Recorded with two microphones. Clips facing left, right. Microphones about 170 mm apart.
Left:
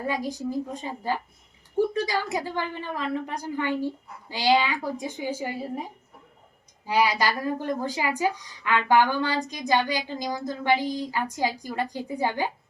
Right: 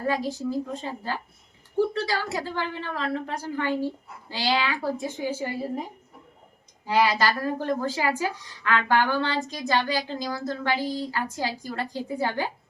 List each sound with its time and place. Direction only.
0.1 s a woman's voice: 15° left (ahead or behind)
6.8 s a woman's voice: 15° left (ahead or behind)